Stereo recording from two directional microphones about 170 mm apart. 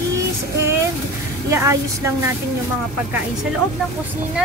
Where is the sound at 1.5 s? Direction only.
15° right (ahead or behind).